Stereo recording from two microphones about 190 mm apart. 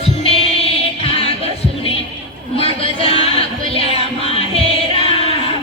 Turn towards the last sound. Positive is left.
turn(degrees=30)  # may be behind; listen again after turning